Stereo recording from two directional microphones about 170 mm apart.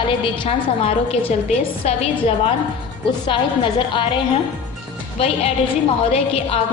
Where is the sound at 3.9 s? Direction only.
30° left (ahead or behind).